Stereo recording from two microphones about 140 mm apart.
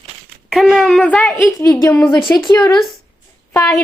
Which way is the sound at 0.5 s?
Centre (ahead or behind).